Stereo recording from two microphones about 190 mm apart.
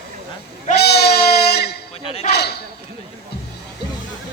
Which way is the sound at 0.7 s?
60° left (ahead or behind).